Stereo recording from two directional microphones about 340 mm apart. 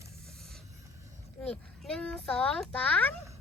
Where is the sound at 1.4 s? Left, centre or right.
Centre.